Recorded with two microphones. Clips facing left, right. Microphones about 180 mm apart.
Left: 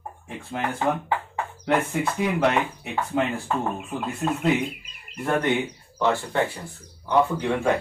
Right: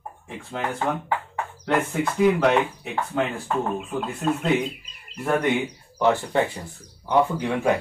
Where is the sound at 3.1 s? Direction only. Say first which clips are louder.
Left 1 dB; 15° left (ahead or behind).